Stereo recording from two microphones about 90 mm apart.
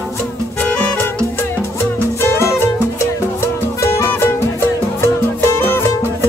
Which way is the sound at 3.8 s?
30° left (ahead or behind).